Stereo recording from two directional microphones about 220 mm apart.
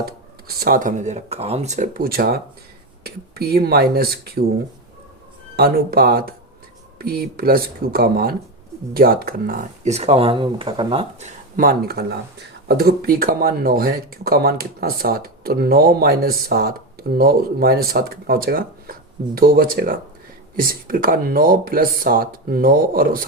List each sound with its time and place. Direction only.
0.0 s speech: 45° right (ahead or behind)
5.5 s speech: 45° right (ahead or behind)